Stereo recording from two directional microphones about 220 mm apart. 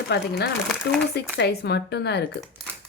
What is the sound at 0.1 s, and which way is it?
Speech, 50° left (ahead or behind).